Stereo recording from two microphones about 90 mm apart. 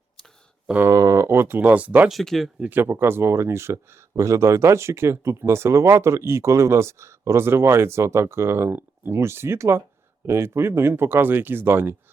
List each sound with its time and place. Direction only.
0.9 s speech: 35° right (ahead or behind); by 2.0 s 15° right (ahead or behind)
2.0 s speech: centre (ahead or behind)
2.6 s speech: 20° right (ahead or behind)